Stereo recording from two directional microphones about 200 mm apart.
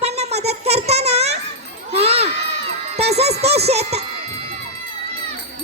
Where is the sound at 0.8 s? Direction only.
30° right (ahead or behind).